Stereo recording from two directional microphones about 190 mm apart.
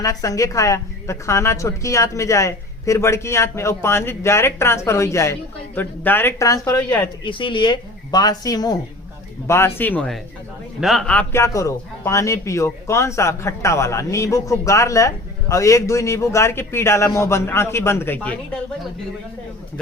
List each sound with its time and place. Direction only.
0.0 s a man's voice: 15° left (ahead or behind)
7.3 s a man's voice: 25° left (ahead or behind); by 18.3 s 10° left (ahead or behind)